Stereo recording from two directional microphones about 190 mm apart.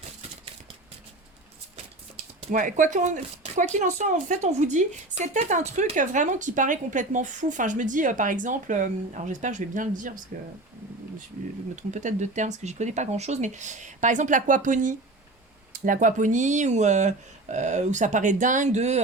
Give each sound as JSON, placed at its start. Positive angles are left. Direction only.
{"t": 2.4, "sound": "speech", "side_deg": -40}
{"t": 11.8, "sound": "speech", "side_deg": -40}